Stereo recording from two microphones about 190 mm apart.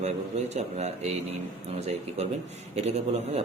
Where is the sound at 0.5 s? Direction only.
35° right (ahead or behind).